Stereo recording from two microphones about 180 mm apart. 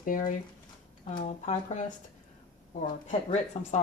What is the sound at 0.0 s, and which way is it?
Speech, 45° left (ahead or behind).